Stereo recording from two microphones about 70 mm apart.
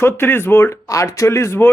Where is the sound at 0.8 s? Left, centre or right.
Left.